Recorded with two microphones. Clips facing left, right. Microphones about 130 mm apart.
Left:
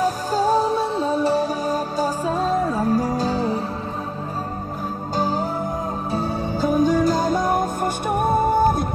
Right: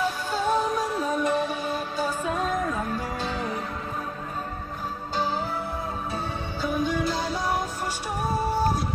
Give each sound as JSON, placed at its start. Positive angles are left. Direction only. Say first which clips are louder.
{"t": 0.0, "sound": "music", "louder": "left 6 dB", "side_deg": 40}
{"t": 5.1, "sound": "music", "louder": "left 5 dB", "side_deg": 40}